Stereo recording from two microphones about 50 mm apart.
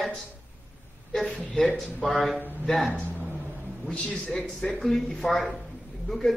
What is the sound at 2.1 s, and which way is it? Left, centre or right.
Speech, centre.